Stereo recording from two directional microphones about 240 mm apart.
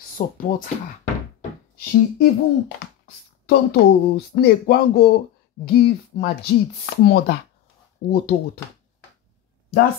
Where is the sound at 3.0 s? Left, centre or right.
Left.